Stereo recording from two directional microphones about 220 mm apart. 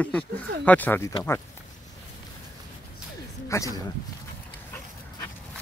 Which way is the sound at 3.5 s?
15° left (ahead or behind).